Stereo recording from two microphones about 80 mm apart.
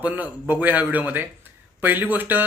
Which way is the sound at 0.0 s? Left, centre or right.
Right.